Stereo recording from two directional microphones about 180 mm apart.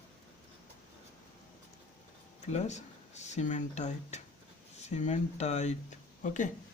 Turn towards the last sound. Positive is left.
turn(degrees=45)  # may be behind; listen again after turning